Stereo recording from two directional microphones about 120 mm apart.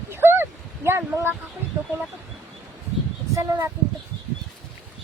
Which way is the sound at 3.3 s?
30° right (ahead or behind).